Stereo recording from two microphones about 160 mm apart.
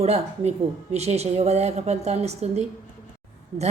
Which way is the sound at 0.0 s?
40° right (ahead or behind).